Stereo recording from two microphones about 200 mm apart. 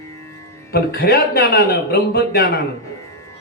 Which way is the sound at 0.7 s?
50° left (ahead or behind).